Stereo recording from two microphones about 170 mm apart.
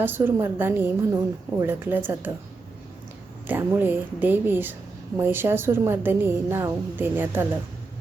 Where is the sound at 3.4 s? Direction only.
10° right (ahead or behind).